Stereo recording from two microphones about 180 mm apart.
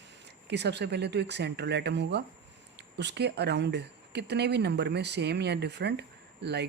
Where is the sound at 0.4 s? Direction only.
70° right (ahead or behind).